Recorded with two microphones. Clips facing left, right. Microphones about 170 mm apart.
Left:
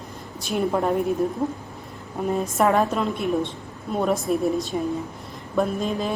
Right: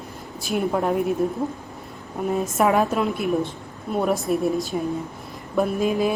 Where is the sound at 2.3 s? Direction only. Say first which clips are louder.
Even; centre (ahead or behind).